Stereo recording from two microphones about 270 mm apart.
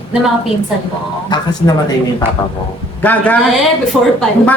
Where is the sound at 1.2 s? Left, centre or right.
Centre.